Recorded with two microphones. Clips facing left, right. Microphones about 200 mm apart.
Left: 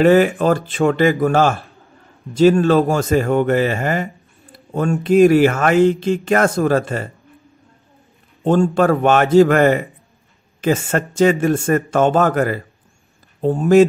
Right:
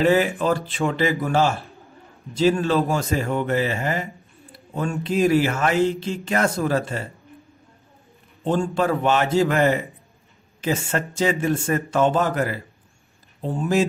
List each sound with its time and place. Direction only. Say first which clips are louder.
0.0 s speech: left 6 dB; 55° left (ahead or behind)
8.5 s speech: left 7 dB; 50° left (ahead or behind)